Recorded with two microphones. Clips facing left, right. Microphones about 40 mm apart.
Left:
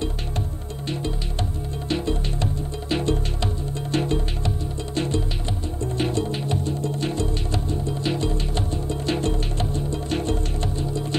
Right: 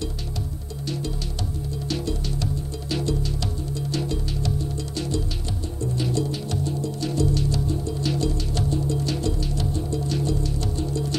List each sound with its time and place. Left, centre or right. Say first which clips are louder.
0.8 s music: left 1 dB; left